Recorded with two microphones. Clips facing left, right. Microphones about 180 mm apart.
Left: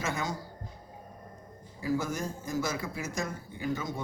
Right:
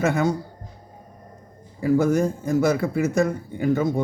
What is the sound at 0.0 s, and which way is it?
Speech, 60° right (ahead or behind).